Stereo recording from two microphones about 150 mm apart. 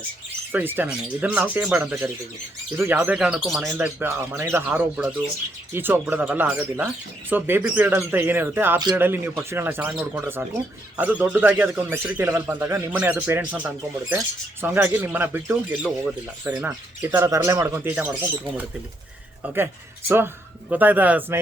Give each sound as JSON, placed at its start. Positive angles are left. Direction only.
{"t": 0.5, "sound": "speech", "side_deg": -15}
{"t": 4.0, "sound": "speech", "side_deg": -15}
{"t": 20.1, "sound": "speech", "side_deg": -15}